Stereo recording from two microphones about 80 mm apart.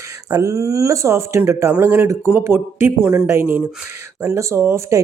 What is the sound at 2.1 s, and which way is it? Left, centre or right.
Speech, right.